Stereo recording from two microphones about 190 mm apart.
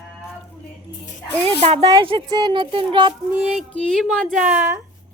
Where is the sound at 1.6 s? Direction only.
35° right (ahead or behind).